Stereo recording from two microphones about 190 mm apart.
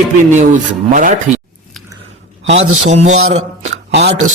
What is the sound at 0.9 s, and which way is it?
Speech, 45° right (ahead or behind).